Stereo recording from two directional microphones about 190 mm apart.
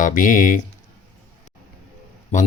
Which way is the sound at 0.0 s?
45° left (ahead or behind).